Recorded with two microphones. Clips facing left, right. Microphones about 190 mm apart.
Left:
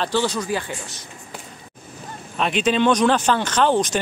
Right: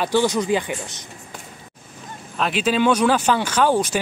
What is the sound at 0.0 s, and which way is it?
Speech, 15° right (ahead or behind).